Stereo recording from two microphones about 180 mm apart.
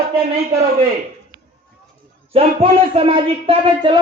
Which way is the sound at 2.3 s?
35° right (ahead or behind).